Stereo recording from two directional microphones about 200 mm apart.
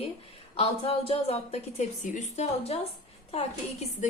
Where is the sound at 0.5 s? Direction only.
30° left (ahead or behind).